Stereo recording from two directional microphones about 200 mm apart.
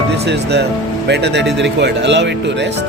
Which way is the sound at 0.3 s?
55° right (ahead or behind).